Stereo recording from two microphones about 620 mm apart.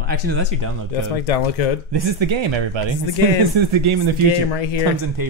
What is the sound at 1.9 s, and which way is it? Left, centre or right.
Speech, right.